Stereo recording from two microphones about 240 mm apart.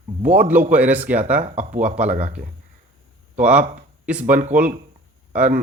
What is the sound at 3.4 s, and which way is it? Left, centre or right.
Speech, centre.